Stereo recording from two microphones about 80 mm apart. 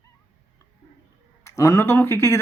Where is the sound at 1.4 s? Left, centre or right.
Left.